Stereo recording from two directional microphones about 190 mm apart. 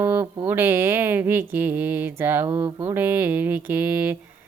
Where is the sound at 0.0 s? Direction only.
10° right (ahead or behind).